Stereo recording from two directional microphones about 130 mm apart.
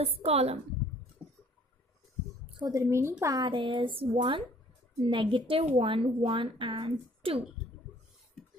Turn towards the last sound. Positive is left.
turn(degrees=-45)  # may be behind; listen again after turning